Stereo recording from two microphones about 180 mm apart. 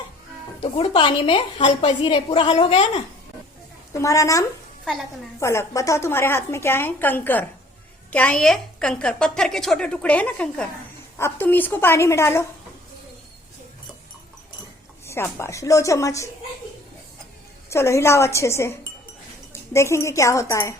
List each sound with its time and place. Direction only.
0.6 s a woman's voice: 35° left (ahead or behind)
4.0 s a woman's voice: 20° left (ahead or behind)
15.0 s a woman's voice: 15° left (ahead or behind)
17.7 s a woman's voice: 15° left (ahead or behind)